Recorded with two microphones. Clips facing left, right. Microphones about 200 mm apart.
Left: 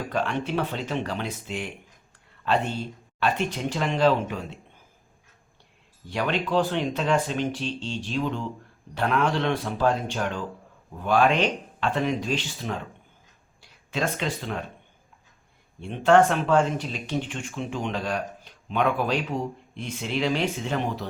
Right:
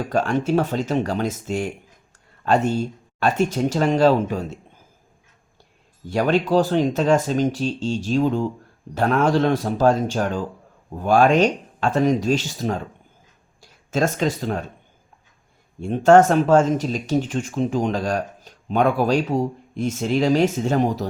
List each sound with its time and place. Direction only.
0.1 s speech: 45° right (ahead or behind)
6.1 s speech: 40° right (ahead or behind)
15.8 s speech: 40° right (ahead or behind)